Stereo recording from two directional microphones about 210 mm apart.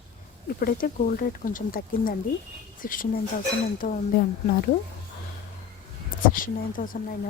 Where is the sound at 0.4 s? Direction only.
40° left (ahead or behind).